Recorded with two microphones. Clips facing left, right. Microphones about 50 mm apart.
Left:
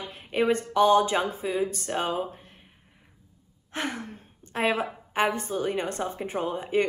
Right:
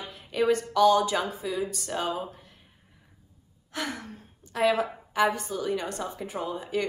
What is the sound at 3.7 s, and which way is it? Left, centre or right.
A woman's voice, left.